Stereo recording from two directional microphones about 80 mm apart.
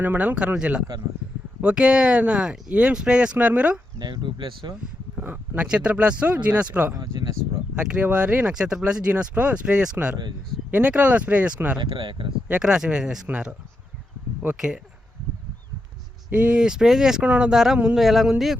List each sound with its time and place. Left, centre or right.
0.0 s speech: right
3.9 s speech: right
5.2 s a sound: centre
5.5 s speech: centre
6.9 s speech: right
7.8 s speech: centre
11.8 s speech: right
12.5 s speech: centre
16.3 s speech: centre